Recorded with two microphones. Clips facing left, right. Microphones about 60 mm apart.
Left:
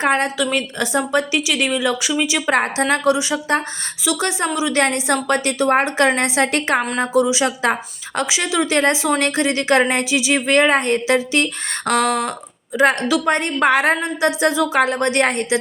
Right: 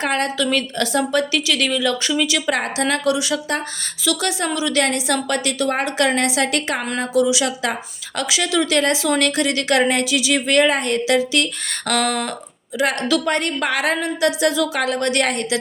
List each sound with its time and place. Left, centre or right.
0.0 s speech: left
2.5 s speech: left
4.8 s a woman's voice: left
12.8 s a woman's voice: left
13.1 s speech: left